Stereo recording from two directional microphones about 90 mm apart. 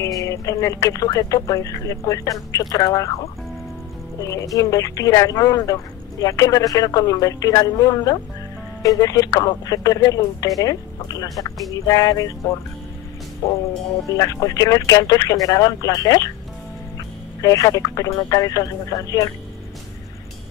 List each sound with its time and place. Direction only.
0.0 s speech: 35° left (ahead or behind)
13.4 s speech: 35° left (ahead or behind)
17.4 s speech: 40° left (ahead or behind)